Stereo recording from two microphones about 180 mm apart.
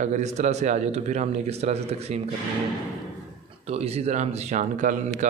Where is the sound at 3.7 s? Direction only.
35° right (ahead or behind).